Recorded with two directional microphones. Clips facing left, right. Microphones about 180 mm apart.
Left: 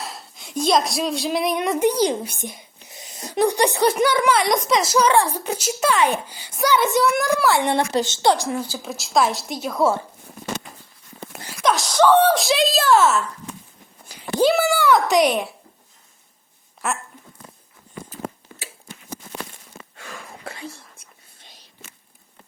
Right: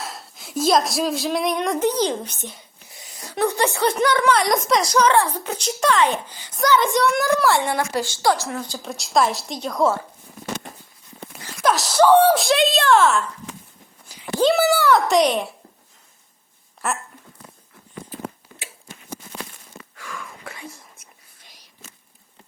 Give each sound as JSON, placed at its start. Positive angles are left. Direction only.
{"t": 0.0, "sound": "speech", "side_deg": 0}
{"t": 7.6, "sound": "a woman's voice", "side_deg": 20}
{"t": 8.6, "sound": "speech", "side_deg": 5}
{"t": 11.6, "sound": "a sound", "side_deg": 0}
{"t": 12.0, "sound": "a sound", "side_deg": -10}
{"t": 12.4, "sound": "speech", "side_deg": 0}
{"t": 14.1, "sound": "a sound", "side_deg": 70}
{"t": 14.4, "sound": "speech", "side_deg": 0}
{"t": 16.8, "sound": "speech", "side_deg": 0}
{"t": 20.0, "sound": "whispering", "side_deg": 30}